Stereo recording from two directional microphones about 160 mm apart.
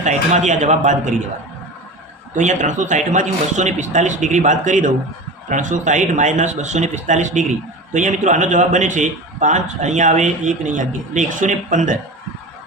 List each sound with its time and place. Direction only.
0.0 s a man's voice: 45° right (ahead or behind)
2.3 s a man's voice: 50° right (ahead or behind)